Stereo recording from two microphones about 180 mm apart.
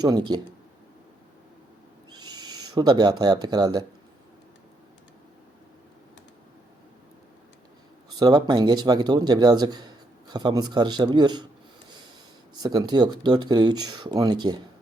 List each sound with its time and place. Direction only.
0.0 s a man's voice: 25° right (ahead or behind)
2.1 s speech: 25° right (ahead or behind)
8.2 s a man's voice: 25° right (ahead or behind)
12.6 s a man's voice: 20° right (ahead or behind)